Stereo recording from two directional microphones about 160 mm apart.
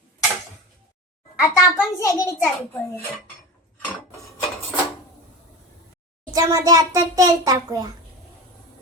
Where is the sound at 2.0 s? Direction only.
20° left (ahead or behind).